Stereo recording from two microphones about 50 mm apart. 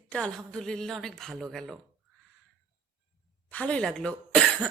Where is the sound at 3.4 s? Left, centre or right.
Left.